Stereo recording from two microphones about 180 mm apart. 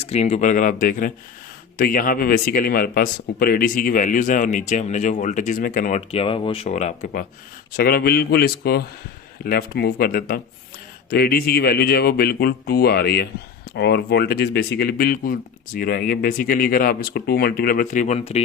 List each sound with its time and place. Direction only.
0.0 s speech: 35° left (ahead or behind)
6.1 s speech: 30° left (ahead or behind)